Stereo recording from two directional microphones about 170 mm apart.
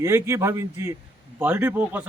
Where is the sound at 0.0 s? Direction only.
15° right (ahead or behind).